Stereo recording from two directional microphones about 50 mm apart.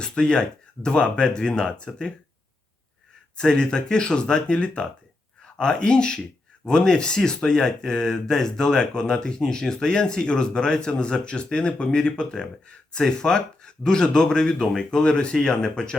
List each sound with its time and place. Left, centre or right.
0.0 s speech: centre
3.3 s speech: centre